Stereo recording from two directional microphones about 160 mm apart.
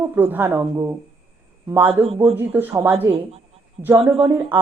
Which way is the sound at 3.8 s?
10° right (ahead or behind).